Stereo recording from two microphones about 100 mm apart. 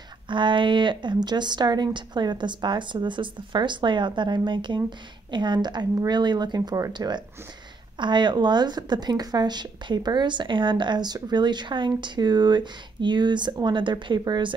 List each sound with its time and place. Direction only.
0.3 s speech: 55° right (ahead or behind)